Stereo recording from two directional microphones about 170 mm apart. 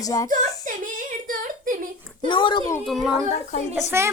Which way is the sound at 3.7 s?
10° right (ahead or behind).